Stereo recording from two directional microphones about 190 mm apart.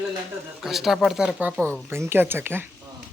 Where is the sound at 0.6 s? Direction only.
Centre (ahead or behind).